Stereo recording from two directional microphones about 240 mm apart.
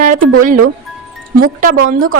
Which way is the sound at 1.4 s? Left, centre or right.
Right.